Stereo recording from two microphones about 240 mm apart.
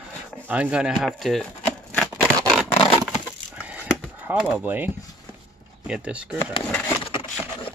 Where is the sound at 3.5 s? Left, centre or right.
Centre.